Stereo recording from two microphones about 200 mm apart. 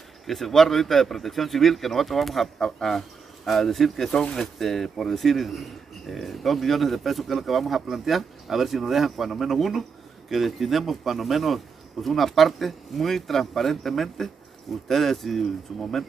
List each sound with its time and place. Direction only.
0.3 s speech: centre (ahead or behind)